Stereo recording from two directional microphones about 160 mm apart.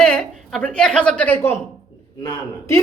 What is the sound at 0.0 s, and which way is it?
A woman's voice, 5° left (ahead or behind).